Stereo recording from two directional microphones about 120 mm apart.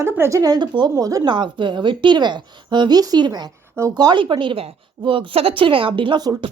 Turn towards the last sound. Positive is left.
turn(degrees=-40)  # may be behind; listen again after turning